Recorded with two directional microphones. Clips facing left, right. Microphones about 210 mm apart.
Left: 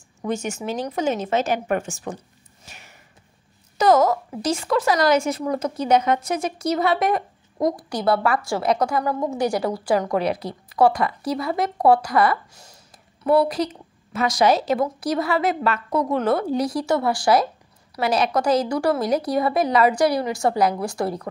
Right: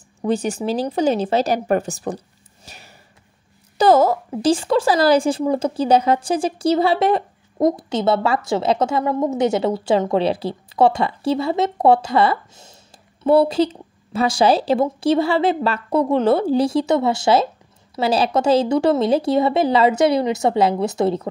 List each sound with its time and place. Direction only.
0.2 s speech: 35° right (ahead or behind)